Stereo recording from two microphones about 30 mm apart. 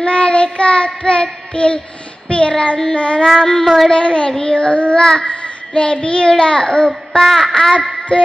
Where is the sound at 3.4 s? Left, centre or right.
Left.